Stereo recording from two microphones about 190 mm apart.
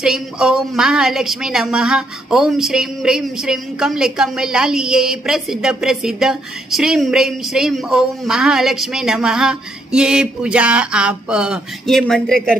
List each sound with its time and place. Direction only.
0.0 s a woman's voice: 5° right (ahead or behind)